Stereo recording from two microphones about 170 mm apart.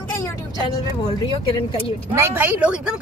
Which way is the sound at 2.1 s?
15° right (ahead or behind).